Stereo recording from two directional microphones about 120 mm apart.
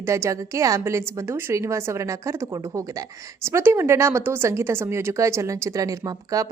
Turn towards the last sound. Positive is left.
turn(degrees=-30)  # may be behind; listen again after turning